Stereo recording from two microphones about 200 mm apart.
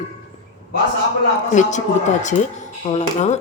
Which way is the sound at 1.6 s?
35° left (ahead or behind).